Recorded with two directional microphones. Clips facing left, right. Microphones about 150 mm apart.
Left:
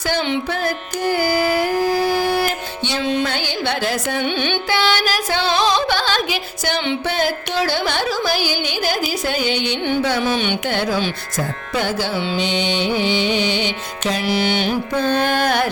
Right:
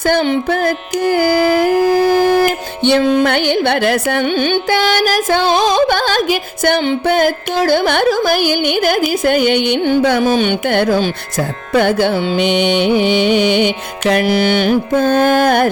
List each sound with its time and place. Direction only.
0.1 s music: 50° right (ahead or behind)
4.4 s music: 45° right (ahead or behind)